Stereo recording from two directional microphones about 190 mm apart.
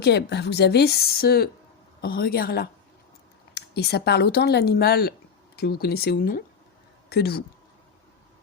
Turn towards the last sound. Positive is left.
turn(degrees=55)  # may be behind; listen again after turning